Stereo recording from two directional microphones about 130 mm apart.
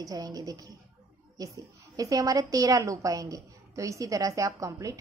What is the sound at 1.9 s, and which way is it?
A woman's voice, 30° right (ahead or behind).